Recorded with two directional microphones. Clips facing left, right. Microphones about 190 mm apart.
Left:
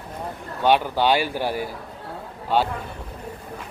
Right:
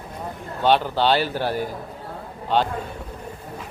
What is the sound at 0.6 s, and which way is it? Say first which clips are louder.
A man's voice: even; 10° left (ahead or behind).